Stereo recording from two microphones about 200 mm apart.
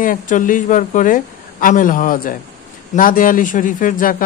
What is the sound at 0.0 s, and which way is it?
A woman's voice, 40° left (ahead or behind).